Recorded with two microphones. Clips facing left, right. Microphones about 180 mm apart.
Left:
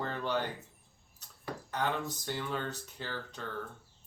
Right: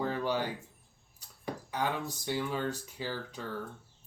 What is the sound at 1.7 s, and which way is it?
Speech, 10° right (ahead or behind).